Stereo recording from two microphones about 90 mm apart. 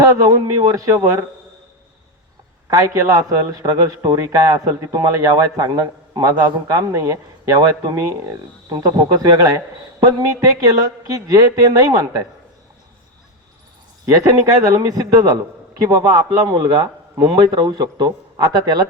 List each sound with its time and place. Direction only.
0.3 s a man's voice: 40° right (ahead or behind)
2.6 s a man's voice: 40° right (ahead or behind)
4.9 s a man's voice: 45° right (ahead or behind)
8.7 s a man's voice: 45° right (ahead or behind)
10.2 s a man's voice: 45° right (ahead or behind)
14.0 s a man's voice: 35° right (ahead or behind)